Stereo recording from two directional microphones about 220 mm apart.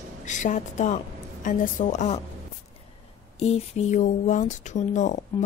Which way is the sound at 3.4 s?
30° left (ahead or behind).